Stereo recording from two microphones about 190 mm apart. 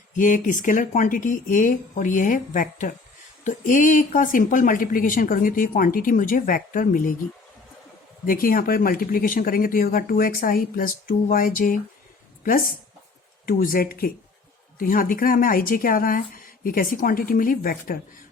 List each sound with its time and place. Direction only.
0.2 s speech: 45° left (ahead or behind)
8.3 s speech: 50° left (ahead or behind)
13.4 s speech: 45° left (ahead or behind)